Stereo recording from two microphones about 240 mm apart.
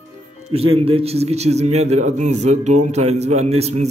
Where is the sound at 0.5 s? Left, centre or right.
Right.